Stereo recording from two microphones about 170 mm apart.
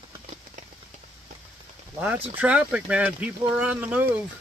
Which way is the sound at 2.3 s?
10° right (ahead or behind).